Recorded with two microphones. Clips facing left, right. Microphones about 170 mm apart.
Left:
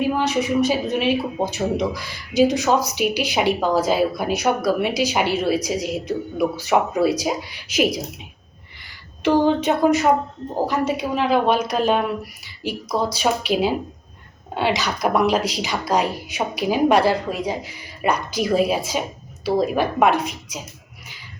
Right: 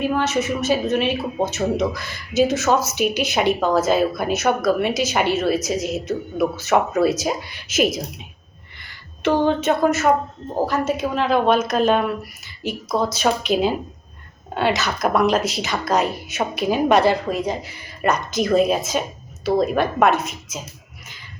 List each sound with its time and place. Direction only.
0.1 s speech: 15° left (ahead or behind)